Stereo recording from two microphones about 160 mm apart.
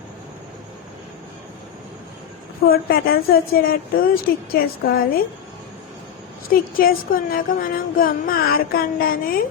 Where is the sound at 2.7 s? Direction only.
70° left (ahead or behind).